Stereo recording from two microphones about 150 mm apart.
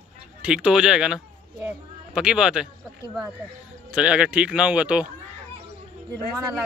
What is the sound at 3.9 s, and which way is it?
Speech, 5° right (ahead or behind).